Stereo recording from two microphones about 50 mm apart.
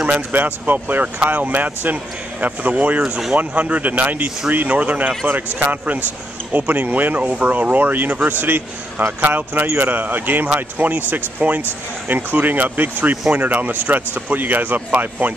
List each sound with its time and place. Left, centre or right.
0.1 s speech: right
3.0 s speech: centre
3.3 s a man's voice: right